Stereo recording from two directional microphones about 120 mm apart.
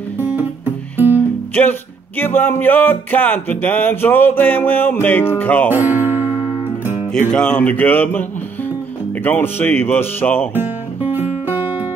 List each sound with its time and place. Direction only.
0.2 s music: 15° right (ahead or behind)
1.1 s music: 15° left (ahead or behind)
5.7 s guitar: 15° right (ahead or behind)
7.2 s music: 10° left (ahead or behind)
10.5 s music: 15° right (ahead or behind)